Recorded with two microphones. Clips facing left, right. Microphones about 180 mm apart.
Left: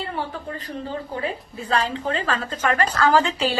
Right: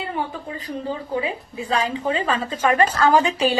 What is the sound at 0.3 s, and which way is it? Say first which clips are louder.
A woman's voice: right 1 dB; 10° right (ahead or behind).